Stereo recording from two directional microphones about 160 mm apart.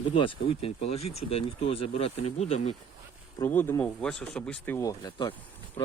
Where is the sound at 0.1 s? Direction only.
35° left (ahead or behind).